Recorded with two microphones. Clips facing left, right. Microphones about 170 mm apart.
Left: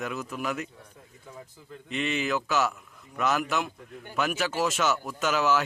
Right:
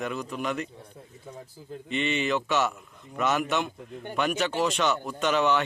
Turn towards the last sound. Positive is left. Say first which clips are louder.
# right 1 dB
turn(degrees=0)  # may be behind; listen again after turning